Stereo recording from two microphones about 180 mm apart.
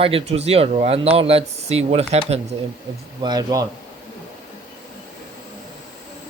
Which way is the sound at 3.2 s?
20° right (ahead or behind).